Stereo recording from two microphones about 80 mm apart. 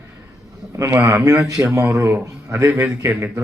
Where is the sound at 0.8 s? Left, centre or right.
Right.